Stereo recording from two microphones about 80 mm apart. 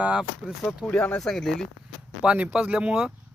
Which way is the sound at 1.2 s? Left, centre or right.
Centre.